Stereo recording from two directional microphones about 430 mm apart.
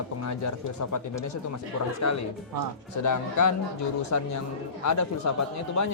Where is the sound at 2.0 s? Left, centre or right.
Left.